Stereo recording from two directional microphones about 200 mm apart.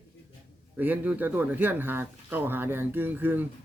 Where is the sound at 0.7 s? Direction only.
10° right (ahead or behind).